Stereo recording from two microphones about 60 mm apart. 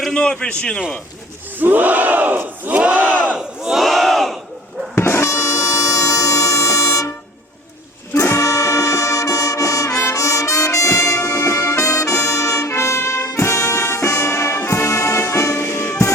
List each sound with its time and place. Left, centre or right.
0.1 s a man's voice: centre
1.5 s battle cry: right
3.2 s crowd: centre
3.8 s battle cry: centre
4.9 s music: left
8.1 s brass instrument: left
10.0 s music: left
15.5 s music: left